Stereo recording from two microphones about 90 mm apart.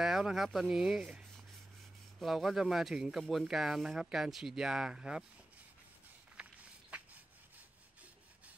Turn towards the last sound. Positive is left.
turn(degrees=-15)  # may be behind; listen again after turning